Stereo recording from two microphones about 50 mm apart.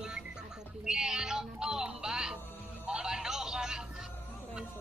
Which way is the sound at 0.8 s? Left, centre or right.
Centre.